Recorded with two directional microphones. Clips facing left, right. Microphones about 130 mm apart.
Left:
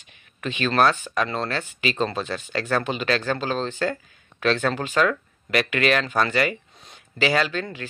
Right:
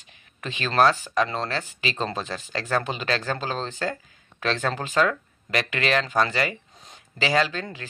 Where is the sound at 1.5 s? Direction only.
30° right (ahead or behind).